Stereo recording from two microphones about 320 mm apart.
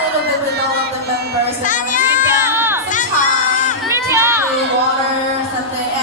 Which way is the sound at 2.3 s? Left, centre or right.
Centre.